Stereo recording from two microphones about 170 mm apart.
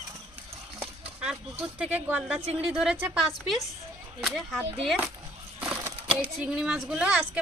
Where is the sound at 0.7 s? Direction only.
5° right (ahead or behind).